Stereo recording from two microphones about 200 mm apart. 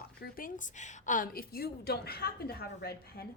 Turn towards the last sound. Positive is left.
turn(degrees=50)  # may be behind; listen again after turning